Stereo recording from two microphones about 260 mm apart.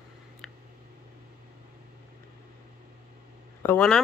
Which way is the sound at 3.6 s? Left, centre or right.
Centre.